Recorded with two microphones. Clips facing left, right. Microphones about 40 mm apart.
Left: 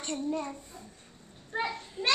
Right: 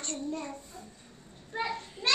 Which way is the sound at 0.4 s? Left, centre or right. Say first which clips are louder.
Left 2 dB; centre.